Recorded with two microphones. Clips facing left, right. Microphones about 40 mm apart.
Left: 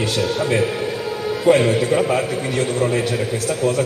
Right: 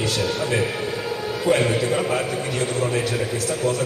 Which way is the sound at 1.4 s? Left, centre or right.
Left.